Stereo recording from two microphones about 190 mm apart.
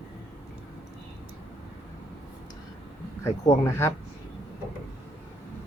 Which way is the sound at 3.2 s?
15° left (ahead or behind).